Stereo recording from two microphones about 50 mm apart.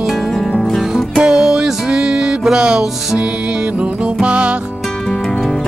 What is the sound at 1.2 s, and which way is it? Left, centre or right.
Music, centre.